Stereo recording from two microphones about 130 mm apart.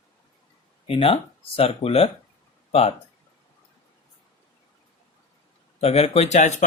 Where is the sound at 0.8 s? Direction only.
45° left (ahead or behind).